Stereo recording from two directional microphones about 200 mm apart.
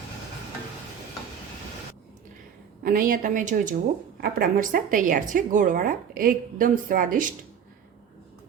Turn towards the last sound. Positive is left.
turn(degrees=-40)  # may be behind; listen again after turning